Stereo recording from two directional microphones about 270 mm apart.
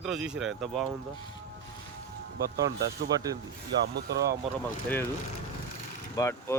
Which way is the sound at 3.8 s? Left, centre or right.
Right.